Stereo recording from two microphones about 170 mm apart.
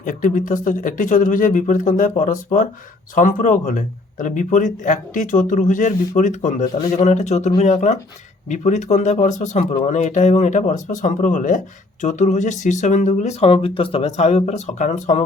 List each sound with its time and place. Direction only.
0.0 s speech: 50° left (ahead or behind)